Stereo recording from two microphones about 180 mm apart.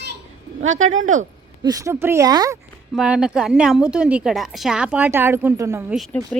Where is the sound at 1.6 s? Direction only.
20° right (ahead or behind).